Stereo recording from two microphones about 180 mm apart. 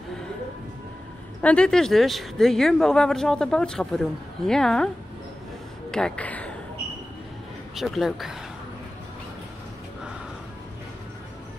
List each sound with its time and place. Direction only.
1.4 s speech: 5° left (ahead or behind)
7.7 s speech: centre (ahead or behind)